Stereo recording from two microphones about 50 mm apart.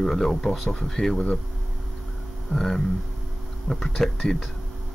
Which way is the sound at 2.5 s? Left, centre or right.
Centre.